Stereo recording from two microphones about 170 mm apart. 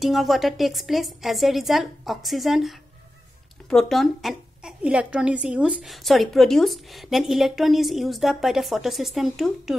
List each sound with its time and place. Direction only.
0.0 s a woman's voice: centre (ahead or behind)